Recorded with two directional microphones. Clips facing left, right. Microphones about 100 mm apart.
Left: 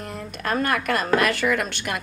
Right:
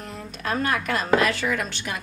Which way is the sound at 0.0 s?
55° left (ahead or behind).